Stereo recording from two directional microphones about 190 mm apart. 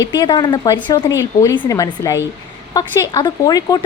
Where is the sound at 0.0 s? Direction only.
20° left (ahead or behind).